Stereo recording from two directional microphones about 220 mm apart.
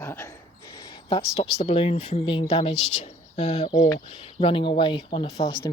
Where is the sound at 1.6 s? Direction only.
25° left (ahead or behind).